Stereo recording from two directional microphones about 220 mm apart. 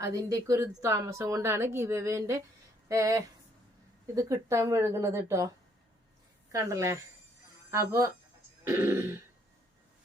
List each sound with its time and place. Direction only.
0.0 s a woman's voice: 15° right (ahead or behind)
6.5 s a woman's voice: 15° right (ahead or behind)
8.6 s throat clearing: 10° right (ahead or behind)